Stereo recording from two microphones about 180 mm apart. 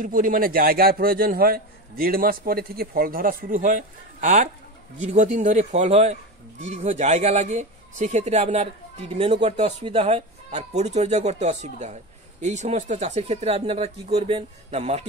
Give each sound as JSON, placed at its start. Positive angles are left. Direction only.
{"t": 0.0, "sound": "a man's voice", "side_deg": -50}